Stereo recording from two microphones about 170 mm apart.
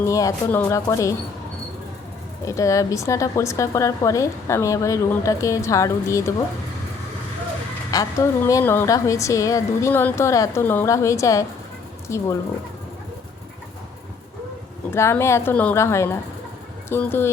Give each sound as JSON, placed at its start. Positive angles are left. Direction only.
{"t": 0.0, "sound": "speech", "side_deg": 20}
{"t": 2.4, "sound": "speech", "side_deg": 20}
{"t": 7.9, "sound": "speech", "side_deg": 20}
{"t": 14.9, "sound": "speech", "side_deg": 15}